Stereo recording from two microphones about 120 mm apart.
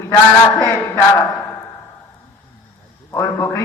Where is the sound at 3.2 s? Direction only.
25° left (ahead or behind).